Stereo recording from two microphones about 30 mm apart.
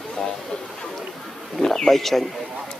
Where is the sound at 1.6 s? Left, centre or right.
Centre.